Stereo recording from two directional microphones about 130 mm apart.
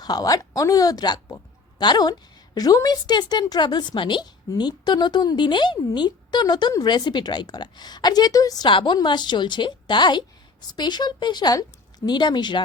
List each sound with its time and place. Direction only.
0.0 s speech: 30° left (ahead or behind)